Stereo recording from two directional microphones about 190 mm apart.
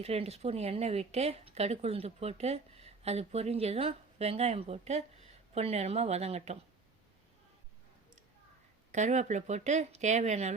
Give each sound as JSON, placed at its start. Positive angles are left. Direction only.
{"t": 0.0, "sound": "speech", "side_deg": -35}
{"t": 8.9, "sound": "speech", "side_deg": -40}